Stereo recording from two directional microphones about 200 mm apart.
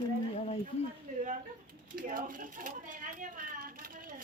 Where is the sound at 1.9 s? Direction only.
45° right (ahead or behind).